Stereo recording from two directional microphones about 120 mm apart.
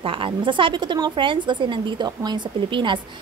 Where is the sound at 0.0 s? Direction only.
45° right (ahead or behind).